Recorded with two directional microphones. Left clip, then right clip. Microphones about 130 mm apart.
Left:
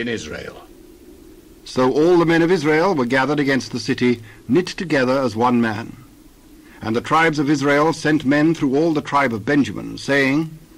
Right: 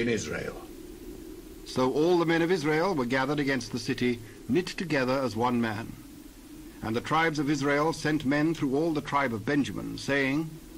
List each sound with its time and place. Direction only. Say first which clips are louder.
0.3 s a man's voice: left 3 dB; 35° left (ahead or behind)
1.7 s a man's voice: left 10 dB; 45° left (ahead or behind)